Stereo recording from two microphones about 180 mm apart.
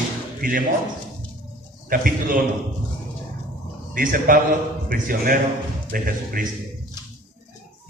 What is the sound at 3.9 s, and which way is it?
A man's voice, 50° right (ahead or behind).